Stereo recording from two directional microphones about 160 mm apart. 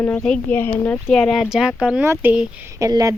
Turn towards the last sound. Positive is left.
turn(degrees=-20)  # may be behind; listen again after turning